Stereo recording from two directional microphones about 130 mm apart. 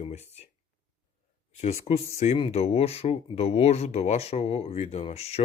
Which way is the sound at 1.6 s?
55° left (ahead or behind).